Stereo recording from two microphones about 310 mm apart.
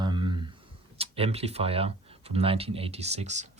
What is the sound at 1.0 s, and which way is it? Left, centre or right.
Speech, centre.